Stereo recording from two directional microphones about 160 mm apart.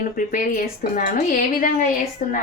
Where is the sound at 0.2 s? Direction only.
60° left (ahead or behind).